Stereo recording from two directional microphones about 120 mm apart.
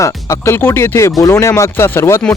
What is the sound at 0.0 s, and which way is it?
Speech, 25° left (ahead or behind).